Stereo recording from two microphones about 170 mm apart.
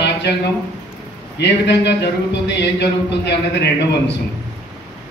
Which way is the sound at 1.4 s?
90° left.